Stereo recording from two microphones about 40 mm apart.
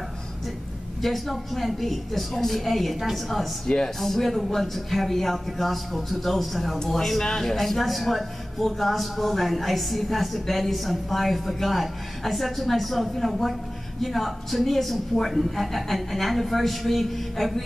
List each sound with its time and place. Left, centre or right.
1.0 s a man's voice: centre
3.6 s speech: centre
4.0 s a man's voice: centre